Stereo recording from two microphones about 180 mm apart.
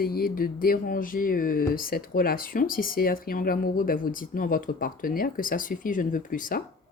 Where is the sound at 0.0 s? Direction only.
55° left (ahead or behind).